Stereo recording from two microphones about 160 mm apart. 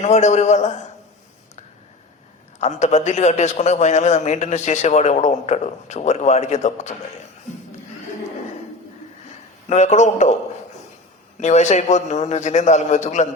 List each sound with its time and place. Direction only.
0.0 s a man's voice: 45° left (ahead or behind)
2.6 s a man's voice: 45° left (ahead or behind)
9.6 s a man's voice: 45° left (ahead or behind)
11.3 s a man's voice: 45° left (ahead or behind)